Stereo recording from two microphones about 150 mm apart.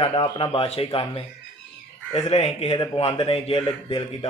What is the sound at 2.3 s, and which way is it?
A man's voice, 45° left (ahead or behind).